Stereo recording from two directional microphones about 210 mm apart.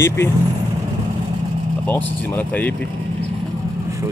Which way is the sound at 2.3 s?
10° left (ahead or behind).